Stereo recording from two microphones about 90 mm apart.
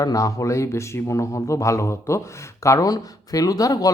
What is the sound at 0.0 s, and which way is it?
Speech, 40° left (ahead or behind).